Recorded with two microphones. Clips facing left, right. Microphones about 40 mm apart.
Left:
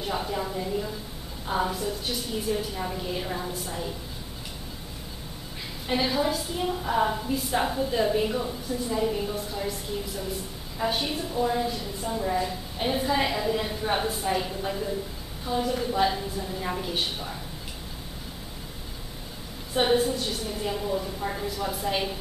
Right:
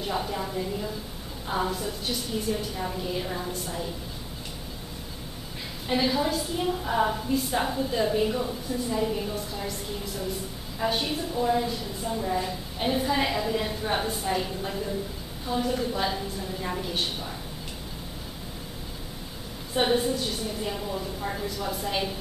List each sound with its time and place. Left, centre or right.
0.0 s a woman's voice: centre
5.9 s a woman's voice: centre
19.7 s a woman's voice: centre